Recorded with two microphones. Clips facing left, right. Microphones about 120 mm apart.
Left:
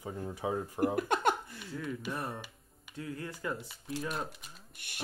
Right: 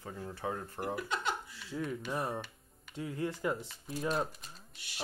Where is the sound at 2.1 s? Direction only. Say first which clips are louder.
Right 2 dB; 20° right (ahead or behind).